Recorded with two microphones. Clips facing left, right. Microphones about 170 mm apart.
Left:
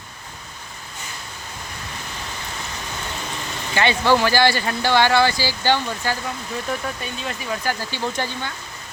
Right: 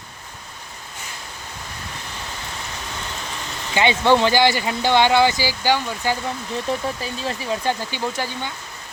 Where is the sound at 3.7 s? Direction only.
20° right (ahead or behind).